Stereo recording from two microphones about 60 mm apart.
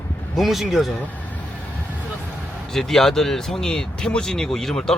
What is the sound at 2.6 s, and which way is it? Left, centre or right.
Speech, centre.